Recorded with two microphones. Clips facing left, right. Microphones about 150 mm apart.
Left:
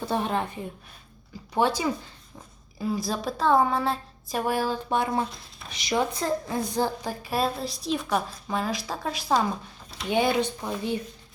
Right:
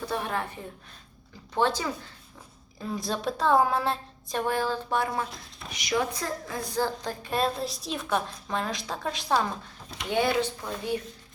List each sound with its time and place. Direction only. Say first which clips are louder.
0.0 s a woman's voice: left 4 dB; 25° left (ahead or behind); by 9.5 s 5° left (ahead or behind)
10.1 s speech: left 2 dB; 15° left (ahead or behind)